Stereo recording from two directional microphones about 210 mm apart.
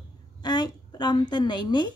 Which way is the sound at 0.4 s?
20° left (ahead or behind).